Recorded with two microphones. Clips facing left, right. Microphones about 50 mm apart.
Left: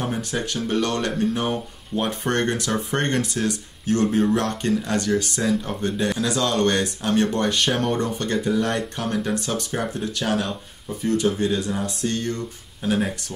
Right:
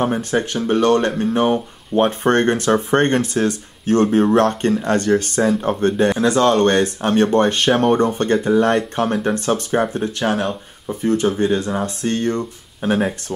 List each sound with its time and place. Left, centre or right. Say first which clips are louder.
0.0 s speech: right 7 dB; right